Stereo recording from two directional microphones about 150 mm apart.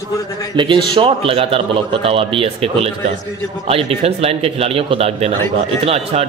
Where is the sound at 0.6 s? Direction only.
35° right (ahead or behind).